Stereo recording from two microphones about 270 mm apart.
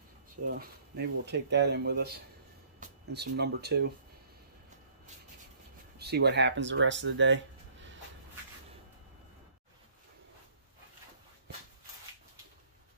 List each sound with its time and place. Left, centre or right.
0.5 s speech: right
5.9 s speech: right